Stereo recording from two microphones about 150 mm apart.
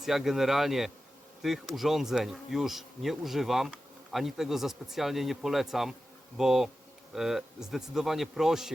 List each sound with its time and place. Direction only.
0.0 s speech: centre (ahead or behind)